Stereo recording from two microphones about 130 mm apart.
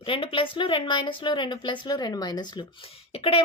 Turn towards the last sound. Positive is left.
turn(degrees=50)  # may be behind; listen again after turning